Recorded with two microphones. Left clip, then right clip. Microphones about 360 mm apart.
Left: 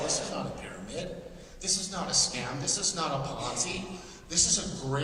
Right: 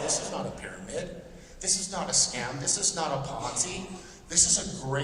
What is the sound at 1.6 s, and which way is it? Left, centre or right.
A man's voice, centre.